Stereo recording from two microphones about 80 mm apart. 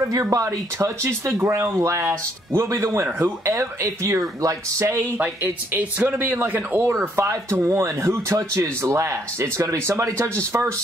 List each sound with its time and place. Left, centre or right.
0.1 s speech: right
5.2 s speech: right